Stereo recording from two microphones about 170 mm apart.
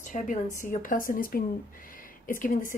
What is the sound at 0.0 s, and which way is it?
Speech, 50° left (ahead or behind).